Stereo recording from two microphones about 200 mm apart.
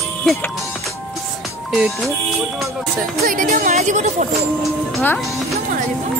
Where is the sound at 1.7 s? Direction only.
Centre (ahead or behind).